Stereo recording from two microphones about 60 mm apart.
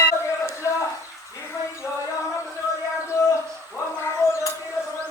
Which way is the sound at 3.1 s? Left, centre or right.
Left.